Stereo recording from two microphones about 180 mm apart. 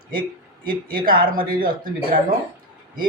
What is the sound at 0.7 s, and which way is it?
Speech, 55° right (ahead or behind).